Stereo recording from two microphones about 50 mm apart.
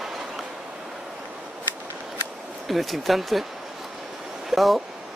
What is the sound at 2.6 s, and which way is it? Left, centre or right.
Speech, centre.